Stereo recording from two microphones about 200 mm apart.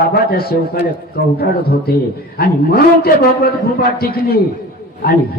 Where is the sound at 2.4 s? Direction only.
50° left (ahead or behind).